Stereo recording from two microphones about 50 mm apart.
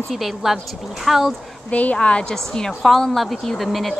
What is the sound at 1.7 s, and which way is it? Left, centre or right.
A woman's voice, left.